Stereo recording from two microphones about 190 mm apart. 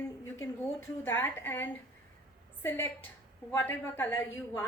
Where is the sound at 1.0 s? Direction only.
10° left (ahead or behind).